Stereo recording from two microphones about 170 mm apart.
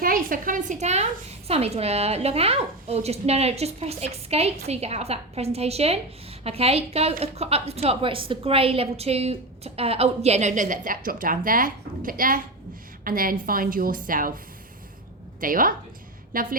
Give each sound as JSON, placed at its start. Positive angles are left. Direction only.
{"t": 0.0, "sound": "a woman's voice", "side_deg": -55}
{"t": 15.4, "sound": "a woman's voice", "side_deg": -55}